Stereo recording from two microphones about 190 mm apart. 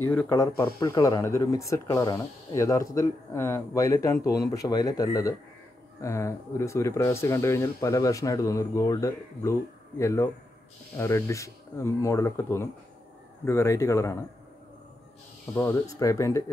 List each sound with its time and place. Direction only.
0.1 s speech: 10° left (ahead or behind)
15.5 s speech: 15° left (ahead or behind)